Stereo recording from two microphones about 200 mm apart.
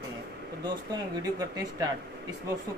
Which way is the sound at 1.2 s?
20° right (ahead or behind).